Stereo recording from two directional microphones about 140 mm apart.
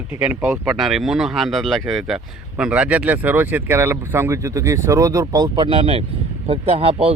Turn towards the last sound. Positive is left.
turn(degrees=-40)  # may be behind; listen again after turning